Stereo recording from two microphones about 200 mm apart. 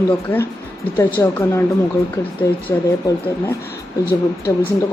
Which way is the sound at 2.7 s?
15° left (ahead or behind).